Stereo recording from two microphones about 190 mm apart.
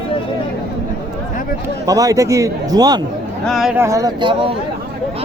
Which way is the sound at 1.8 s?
20° right (ahead or behind).